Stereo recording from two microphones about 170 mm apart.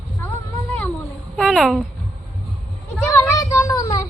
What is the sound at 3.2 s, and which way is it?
Child singing, 15° left (ahead or behind).